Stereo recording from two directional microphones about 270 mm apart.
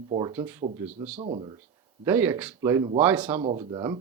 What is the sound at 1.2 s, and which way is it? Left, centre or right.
Speech, centre.